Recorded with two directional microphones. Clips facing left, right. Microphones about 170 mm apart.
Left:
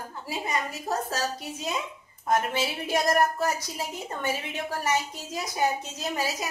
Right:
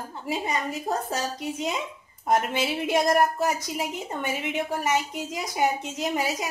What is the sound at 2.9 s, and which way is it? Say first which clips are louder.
A woman's voice: right 2 dB; 20° right (ahead or behind).